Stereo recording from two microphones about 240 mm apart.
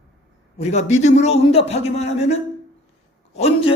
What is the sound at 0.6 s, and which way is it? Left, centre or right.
Speech, left.